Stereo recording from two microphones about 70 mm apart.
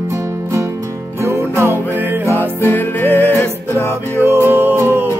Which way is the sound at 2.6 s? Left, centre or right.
Left.